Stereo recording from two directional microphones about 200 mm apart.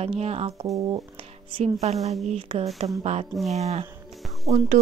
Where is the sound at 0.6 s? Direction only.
15° right (ahead or behind).